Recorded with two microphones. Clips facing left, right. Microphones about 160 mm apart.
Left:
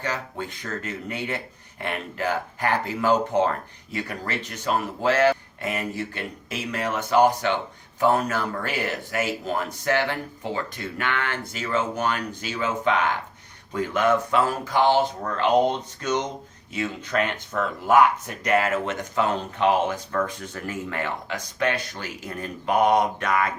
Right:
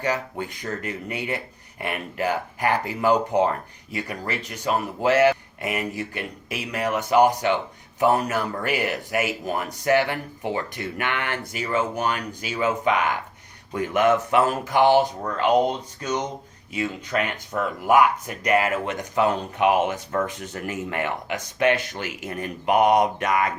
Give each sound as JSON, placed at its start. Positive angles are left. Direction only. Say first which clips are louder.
{"t": 0.0, "sound": "a man's voice", "louder": "right 4 dB", "side_deg": -15}